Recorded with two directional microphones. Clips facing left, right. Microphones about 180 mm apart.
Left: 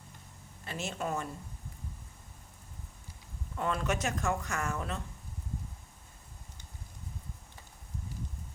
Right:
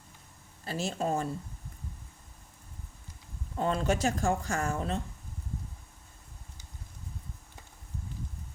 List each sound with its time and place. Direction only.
0.6 s speech: 35° right (ahead or behind)
3.5 s speech: 30° right (ahead or behind)